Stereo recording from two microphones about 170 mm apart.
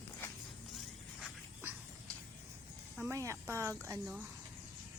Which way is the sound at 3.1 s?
15° right (ahead or behind).